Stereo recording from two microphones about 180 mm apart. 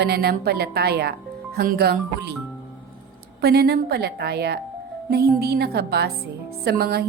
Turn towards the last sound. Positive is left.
turn(degrees=-60)  # may be behind; listen again after turning